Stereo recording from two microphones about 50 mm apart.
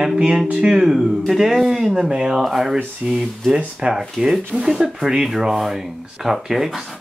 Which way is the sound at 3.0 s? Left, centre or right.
Centre.